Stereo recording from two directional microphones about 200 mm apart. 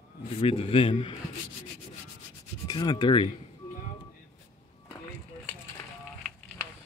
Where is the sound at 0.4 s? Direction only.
30° left (ahead or behind).